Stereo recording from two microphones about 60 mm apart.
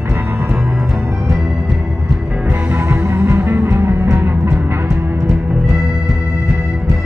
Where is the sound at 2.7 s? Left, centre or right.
Right.